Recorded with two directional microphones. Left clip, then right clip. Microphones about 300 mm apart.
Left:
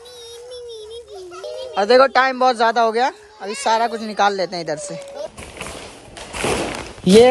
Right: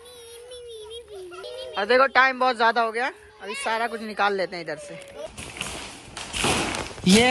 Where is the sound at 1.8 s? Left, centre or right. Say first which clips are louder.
Left 5 dB; centre.